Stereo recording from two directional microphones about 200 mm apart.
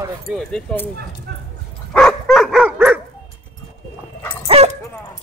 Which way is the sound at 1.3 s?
55° right (ahead or behind).